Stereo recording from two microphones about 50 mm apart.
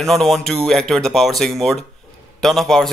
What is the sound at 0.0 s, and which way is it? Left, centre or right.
Speech, centre.